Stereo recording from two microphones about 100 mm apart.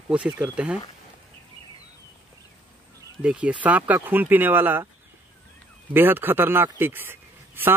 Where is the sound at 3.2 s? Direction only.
10° right (ahead or behind).